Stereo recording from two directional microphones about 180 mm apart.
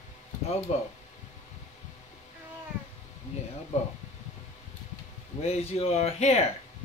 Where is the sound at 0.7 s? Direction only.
35° left (ahead or behind).